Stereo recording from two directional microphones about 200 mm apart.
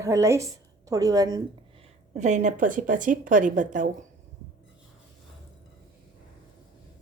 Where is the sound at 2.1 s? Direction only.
35° right (ahead or behind).